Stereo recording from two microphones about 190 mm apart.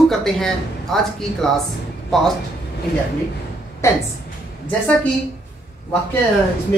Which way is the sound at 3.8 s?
15° left (ahead or behind).